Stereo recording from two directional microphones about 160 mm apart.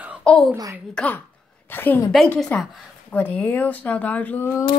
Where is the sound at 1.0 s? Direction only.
10° left (ahead or behind).